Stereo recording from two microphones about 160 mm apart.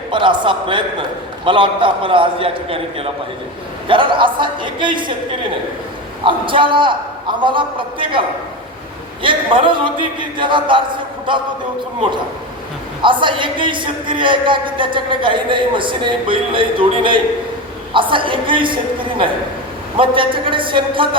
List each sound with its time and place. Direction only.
0.1 s speech: 30° right (ahead or behind)
6.2 s speech: 30° right (ahead or behind)
9.2 s speech: 30° right (ahead or behind)
13.0 s speech: 30° right (ahead or behind)